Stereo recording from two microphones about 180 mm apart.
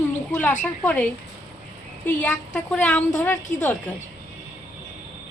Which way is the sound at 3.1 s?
15° left (ahead or behind).